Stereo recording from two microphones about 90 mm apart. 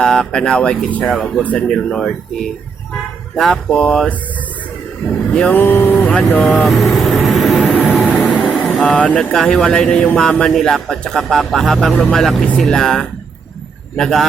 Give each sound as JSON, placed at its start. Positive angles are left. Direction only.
{"t": 0.0, "sound": "speech", "side_deg": 10}
{"t": 5.3, "sound": "speech", "side_deg": 10}
{"t": 5.5, "sound": "speech", "side_deg": 25}
{"t": 6.1, "sound": "speech", "side_deg": 15}
{"t": 6.7, "sound": "speech", "side_deg": 0}
{"t": 7.9, "sound": "vehicle", "side_deg": 15}
{"t": 8.4, "sound": "vehicle", "side_deg": -5}
{"t": 8.7, "sound": "speech", "side_deg": 10}